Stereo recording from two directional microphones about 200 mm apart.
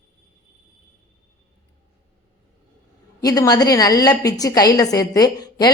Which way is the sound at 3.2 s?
20° left (ahead or behind).